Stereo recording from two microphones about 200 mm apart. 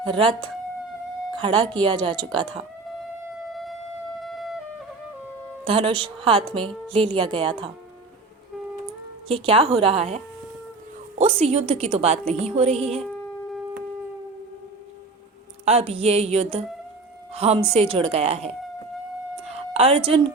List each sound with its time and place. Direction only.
1.4 s speech: 25° right (ahead or behind)
4.2 s music: centre (ahead or behind)
5.6 s speech: 25° right (ahead or behind)
9.3 s a woman's voice: 30° right (ahead or behind)
15.6 s a woman's voice: 30° right (ahead or behind)
19.5 s a sound: 30° right (ahead or behind)